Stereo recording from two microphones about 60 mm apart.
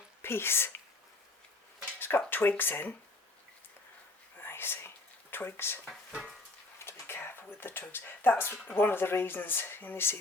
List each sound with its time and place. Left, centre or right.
0.2 s speech: left
2.0 s a sound: left
2.3 s speech: left
4.4 s whispering: left
5.3 s speech: left
5.8 s speech: centre
6.8 s a sound: left
8.7 s speech: left